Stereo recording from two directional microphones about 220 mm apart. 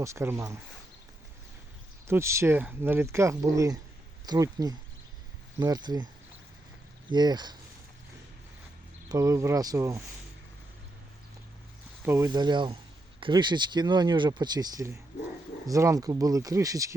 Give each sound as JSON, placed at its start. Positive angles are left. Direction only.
{"t": 0.0, "sound": "speech", "side_deg": -10}
{"t": 2.0, "sound": "speech", "side_deg": -10}
{"t": 7.1, "sound": "speech", "side_deg": -20}
{"t": 9.0, "sound": "speech", "side_deg": -15}
{"t": 12.0, "sound": "speech", "side_deg": -15}